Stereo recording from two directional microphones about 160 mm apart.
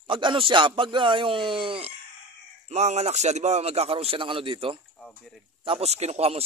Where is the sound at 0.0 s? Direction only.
30° right (ahead or behind).